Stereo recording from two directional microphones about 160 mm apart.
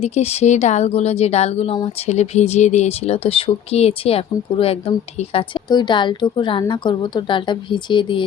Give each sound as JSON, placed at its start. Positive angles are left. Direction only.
{"t": 0.0, "sound": "a woman's voice", "side_deg": 40}